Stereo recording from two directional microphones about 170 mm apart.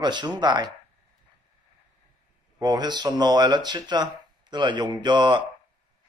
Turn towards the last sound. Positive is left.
turn(degrees=-25)  # may be behind; listen again after turning